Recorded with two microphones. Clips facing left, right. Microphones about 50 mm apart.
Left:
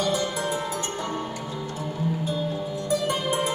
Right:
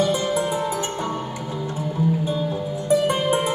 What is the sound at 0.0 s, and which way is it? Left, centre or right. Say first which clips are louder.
Music: right 5 dB; right.